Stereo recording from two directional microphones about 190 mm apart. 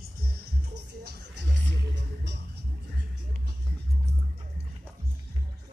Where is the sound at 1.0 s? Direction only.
65° right (ahead or behind).